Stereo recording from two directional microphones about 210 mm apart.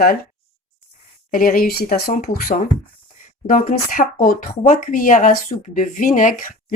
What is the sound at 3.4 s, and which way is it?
Speech, 40° left (ahead or behind).